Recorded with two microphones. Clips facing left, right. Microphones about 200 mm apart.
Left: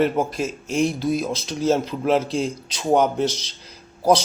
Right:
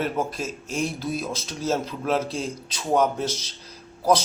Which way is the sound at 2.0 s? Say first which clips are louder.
Left 5 dB; 15° left (ahead or behind).